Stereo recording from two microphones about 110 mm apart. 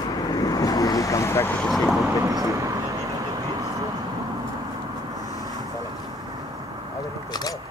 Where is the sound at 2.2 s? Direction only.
30° right (ahead or behind).